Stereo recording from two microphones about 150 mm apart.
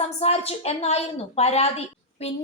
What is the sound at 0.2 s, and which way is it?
A woman's voice, 45° left (ahead or behind).